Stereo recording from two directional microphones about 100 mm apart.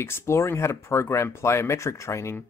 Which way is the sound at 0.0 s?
25° left (ahead or behind).